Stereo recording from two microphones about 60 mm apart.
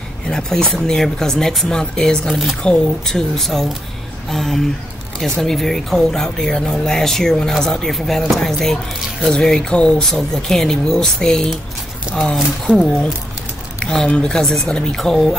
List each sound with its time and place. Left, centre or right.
0.3 s speech: centre
3.1 s speech: centre
10.0 s speech: centre
12.6 s speech: centre